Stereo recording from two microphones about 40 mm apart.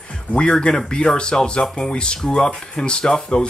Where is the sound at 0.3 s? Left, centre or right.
Left.